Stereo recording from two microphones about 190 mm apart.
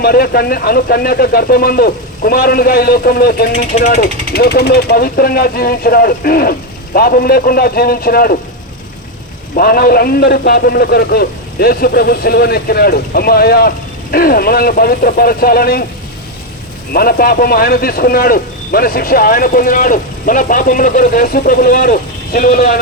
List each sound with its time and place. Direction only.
0.0 s a man's voice: 50° left (ahead or behind)
3.8 s speech: 35° left (ahead or behind)
4.3 s a man's voice: 55° left (ahead or behind)
9.6 s a man's voice: 50° left (ahead or behind)
16.9 s a man's voice: 50° left (ahead or behind)